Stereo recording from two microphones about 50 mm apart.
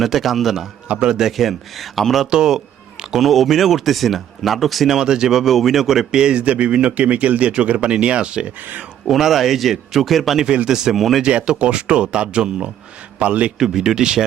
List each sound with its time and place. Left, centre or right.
0.0 s speech: centre
1.0 s speech: centre
1.4 s speech: centre
2.2 s speech: centre
3.2 s speech: centre
4.9 s a man's voice: centre
9.0 s speech: centre
11.2 s a man's voice: centre
13.6 s speech: centre